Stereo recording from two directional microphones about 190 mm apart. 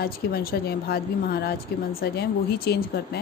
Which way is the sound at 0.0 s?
55° left (ahead or behind).